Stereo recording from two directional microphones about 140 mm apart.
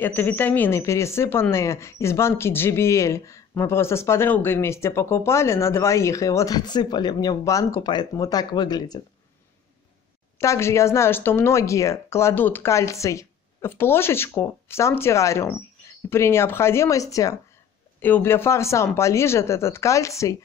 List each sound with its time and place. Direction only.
0.0 s a woman's voice: 15° left (ahead or behind); by 9.0 s 30° left (ahead or behind)
10.4 s a woman's voice: 20° left (ahead or behind)